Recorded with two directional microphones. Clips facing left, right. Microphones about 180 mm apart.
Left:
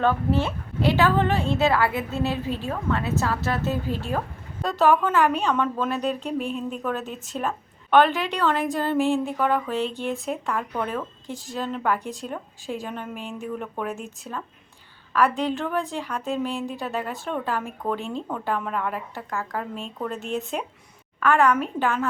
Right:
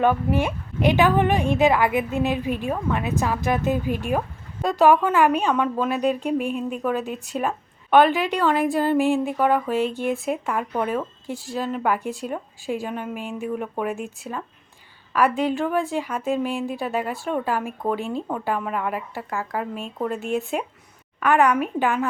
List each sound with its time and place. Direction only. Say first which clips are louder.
0.0 s a woman's voice: right 2 dB; 15° right (ahead or behind)
15.1 s a woman's voice: right 2 dB; 10° right (ahead or behind)